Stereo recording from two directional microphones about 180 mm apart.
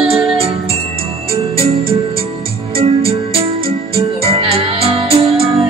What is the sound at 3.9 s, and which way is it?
Music, 35° right (ahead or behind).